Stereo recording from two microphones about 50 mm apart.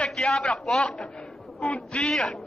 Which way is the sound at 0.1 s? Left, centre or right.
Centre.